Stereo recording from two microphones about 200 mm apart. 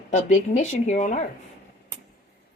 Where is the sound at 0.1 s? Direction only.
40° left (ahead or behind).